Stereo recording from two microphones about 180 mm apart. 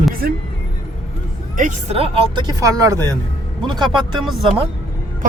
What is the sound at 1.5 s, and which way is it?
Speech, 40° right (ahead or behind).